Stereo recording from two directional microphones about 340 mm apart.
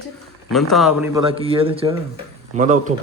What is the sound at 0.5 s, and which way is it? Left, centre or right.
Speech, centre.